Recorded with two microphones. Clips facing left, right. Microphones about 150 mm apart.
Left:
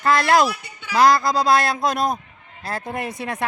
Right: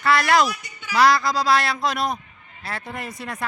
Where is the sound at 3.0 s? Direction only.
60° left (ahead or behind).